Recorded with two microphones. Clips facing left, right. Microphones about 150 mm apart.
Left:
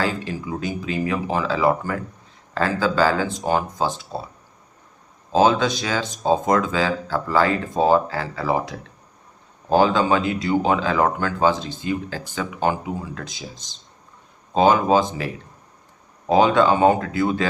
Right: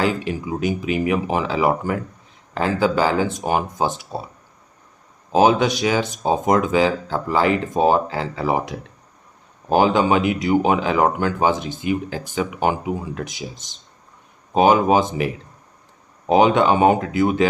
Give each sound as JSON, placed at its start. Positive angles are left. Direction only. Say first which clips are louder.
{"t": 0.0, "sound": "speech", "louder": "right 3 dB", "side_deg": -20}
{"t": 5.3, "sound": "speech", "louder": "right 2 dB", "side_deg": -15}
{"t": 14.5, "sound": "speech", "louder": "right 1 dB", "side_deg": -15}
{"t": 16.3, "sound": "speech", "louder": "right 1 dB", "side_deg": -20}